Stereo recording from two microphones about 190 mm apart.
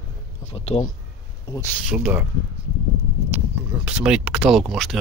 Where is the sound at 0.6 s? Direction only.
35° left (ahead or behind).